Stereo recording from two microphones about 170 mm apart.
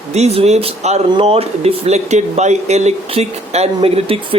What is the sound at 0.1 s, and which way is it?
Speech, 40° right (ahead or behind).